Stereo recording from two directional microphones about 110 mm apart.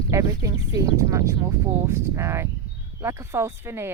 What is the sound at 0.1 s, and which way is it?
Speech, 30° right (ahead or behind).